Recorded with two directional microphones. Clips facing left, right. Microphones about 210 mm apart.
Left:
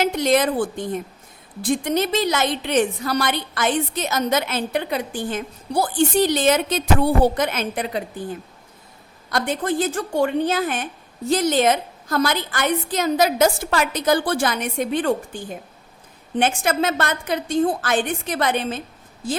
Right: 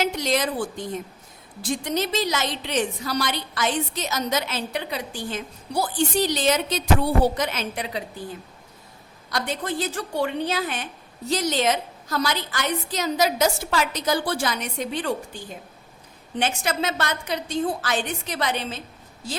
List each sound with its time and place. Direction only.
0.0 s a woman's voice: 55° left (ahead or behind)
9.3 s a woman's voice: 50° left (ahead or behind)